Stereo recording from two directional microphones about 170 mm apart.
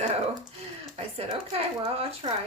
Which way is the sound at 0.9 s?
35° right (ahead or behind).